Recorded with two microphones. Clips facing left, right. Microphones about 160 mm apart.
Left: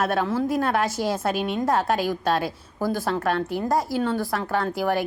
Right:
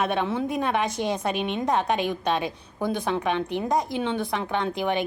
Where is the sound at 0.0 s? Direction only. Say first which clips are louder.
Left 2 dB; 5° left (ahead or behind).